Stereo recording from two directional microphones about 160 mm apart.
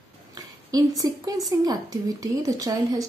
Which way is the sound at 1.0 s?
20° right (ahead or behind).